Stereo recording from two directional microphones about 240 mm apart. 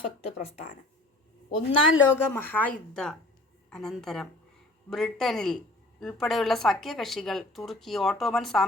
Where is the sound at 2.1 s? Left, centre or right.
Centre.